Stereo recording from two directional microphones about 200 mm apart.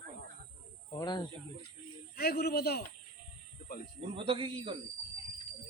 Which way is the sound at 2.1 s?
50° left (ahead or behind).